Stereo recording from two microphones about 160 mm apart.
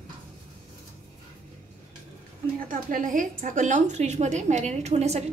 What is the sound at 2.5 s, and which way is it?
A woman's voice, 60° right (ahead or behind).